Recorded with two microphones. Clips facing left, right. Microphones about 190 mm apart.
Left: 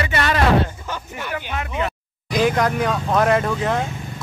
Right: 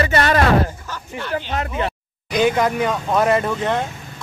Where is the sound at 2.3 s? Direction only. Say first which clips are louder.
Right 1 dB; centre (ahead or behind).